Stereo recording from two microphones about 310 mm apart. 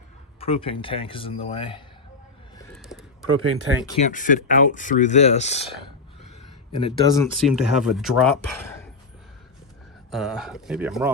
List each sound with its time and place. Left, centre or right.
0.3 s a man's voice: centre
2.7 s a sound: centre
3.4 s speech: right
4.0 s speech: left
6.8 s a man's voice: centre
7.4 s speech: centre
10.1 s speech: centre